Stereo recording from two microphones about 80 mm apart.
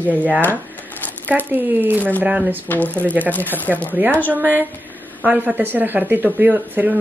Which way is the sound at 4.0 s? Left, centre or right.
Right.